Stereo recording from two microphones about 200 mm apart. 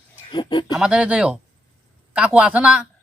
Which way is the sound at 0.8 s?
5° right (ahead or behind).